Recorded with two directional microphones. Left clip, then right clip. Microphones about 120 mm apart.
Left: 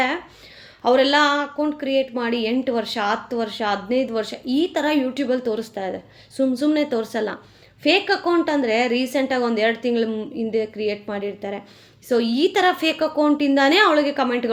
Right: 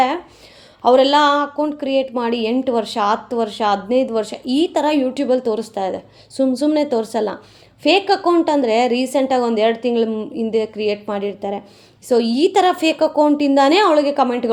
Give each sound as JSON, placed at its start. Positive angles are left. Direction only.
{"t": 0.8, "sound": "speech", "side_deg": -50}